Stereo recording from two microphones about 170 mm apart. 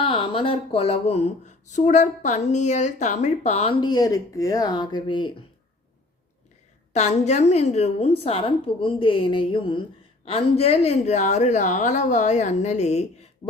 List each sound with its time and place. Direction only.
0.0 s speech: 30° left (ahead or behind)
6.9 s speech: 40° left (ahead or behind)